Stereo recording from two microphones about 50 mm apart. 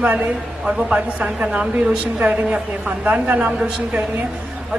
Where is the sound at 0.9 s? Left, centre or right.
Right.